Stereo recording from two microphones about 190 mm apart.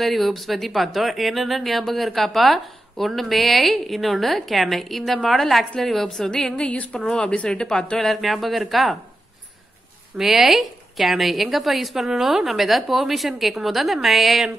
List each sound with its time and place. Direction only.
0.0 s speech: centre (ahead or behind)
10.1 s speech: centre (ahead or behind)